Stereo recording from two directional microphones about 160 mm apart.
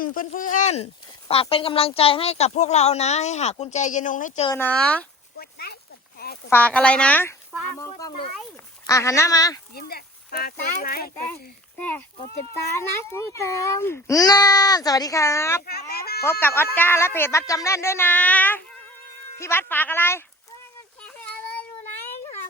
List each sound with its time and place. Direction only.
0.0 s a woman's voice: 60° left (ahead or behind)
4.5 s speech: 10° left (ahead or behind)
5.4 s a sound: 75° left (ahead or behind)
6.5 s speech: 10° left (ahead or behind)
8.9 s speech: 20° left (ahead or behind)
9.7 s speech: 75° left (ahead or behind)
11.8 s speech: 10° left (ahead or behind)
15.6 s speech: 75° left (ahead or behind)
16.2 s speech: 15° left (ahead or behind)
21.0 s child singing: 10° left (ahead or behind)